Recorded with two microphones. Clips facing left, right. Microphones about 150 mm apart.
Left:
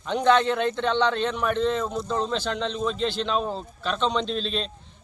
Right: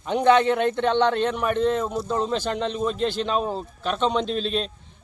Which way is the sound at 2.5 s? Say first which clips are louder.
Right 2 dB; 50° right (ahead or behind).